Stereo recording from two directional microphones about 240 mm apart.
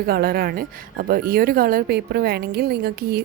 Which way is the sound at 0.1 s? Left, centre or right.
Right.